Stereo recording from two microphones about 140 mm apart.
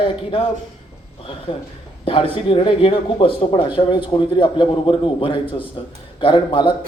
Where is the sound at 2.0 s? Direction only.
40° left (ahead or behind).